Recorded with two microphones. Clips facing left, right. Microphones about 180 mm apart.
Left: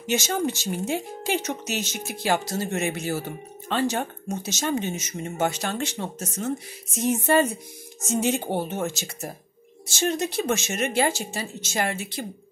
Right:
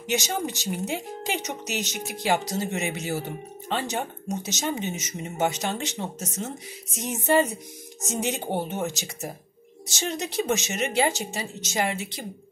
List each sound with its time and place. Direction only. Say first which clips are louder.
0.0 s speech: left 3 dB; 15° right (ahead or behind)